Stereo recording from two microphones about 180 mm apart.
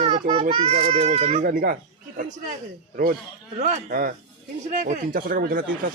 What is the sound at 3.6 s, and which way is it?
Speech, 50° right (ahead or behind).